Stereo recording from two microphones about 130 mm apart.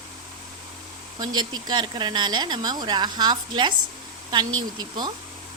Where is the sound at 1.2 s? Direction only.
30° right (ahead or behind).